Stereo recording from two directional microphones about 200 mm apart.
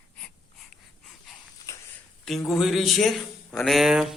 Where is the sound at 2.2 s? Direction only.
Centre (ahead or behind).